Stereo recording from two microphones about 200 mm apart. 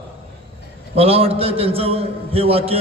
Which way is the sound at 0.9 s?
30° right (ahead or behind).